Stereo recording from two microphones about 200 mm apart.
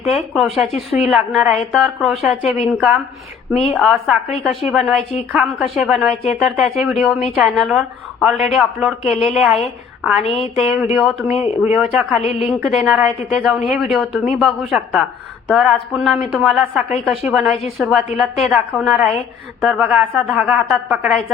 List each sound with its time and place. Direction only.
0.0 s a woman's voice: centre (ahead or behind)
10.8 s speech: 10° right (ahead or behind)
11.0 s a woman's voice: centre (ahead or behind)
11.3 s speech: 30° left (ahead or behind)
11.6 s a woman's voice: 5° right (ahead or behind)
12.2 s a woman's voice: 30° left (ahead or behind)
12.6 s a woman's voice: centre (ahead or behind)